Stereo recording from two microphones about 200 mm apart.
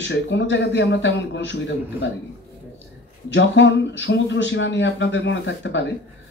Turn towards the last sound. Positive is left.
turn(degrees=60)  # may be behind; listen again after turning